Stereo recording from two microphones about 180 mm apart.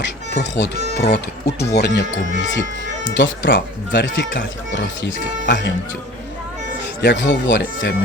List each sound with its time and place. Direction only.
0.3 s speech: 75° left (ahead or behind)
2.5 s speech: 85° left
4.7 s speech: 75° left (ahead or behind)
7.0 s speech: 75° left (ahead or behind)